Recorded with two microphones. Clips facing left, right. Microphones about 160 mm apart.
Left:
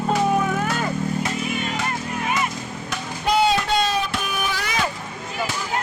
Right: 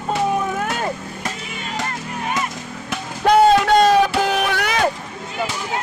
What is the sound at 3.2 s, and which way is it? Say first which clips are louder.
Music: right 7 dB; 50° right (ahead or behind).